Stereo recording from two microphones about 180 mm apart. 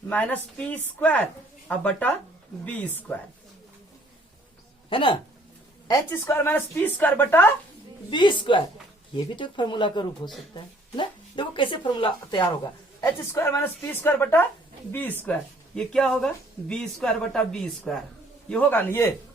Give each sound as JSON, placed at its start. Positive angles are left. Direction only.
{"t": 0.1, "sound": "speech", "side_deg": 10}
{"t": 4.9, "sound": "speech", "side_deg": 30}
{"t": 5.9, "sound": "speech", "side_deg": 15}
{"t": 8.1, "sound": "speech", "side_deg": 25}
{"t": 13.0, "sound": "speech", "side_deg": 15}